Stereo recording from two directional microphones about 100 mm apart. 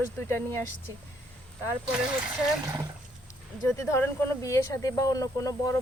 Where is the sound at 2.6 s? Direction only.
35° right (ahead or behind).